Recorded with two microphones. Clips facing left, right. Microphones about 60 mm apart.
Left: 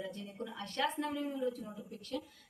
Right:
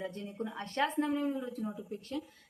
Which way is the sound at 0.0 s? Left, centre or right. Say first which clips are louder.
Right 4 dB; right.